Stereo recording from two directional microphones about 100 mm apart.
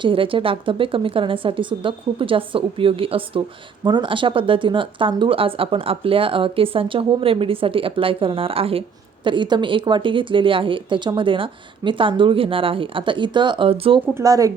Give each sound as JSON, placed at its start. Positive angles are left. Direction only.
{"t": 0.0, "sound": "speech", "side_deg": -60}
{"t": 3.8, "sound": "speech", "side_deg": -55}
{"t": 9.2, "sound": "speech", "side_deg": -55}
{"t": 14.2, "sound": "speech", "side_deg": -35}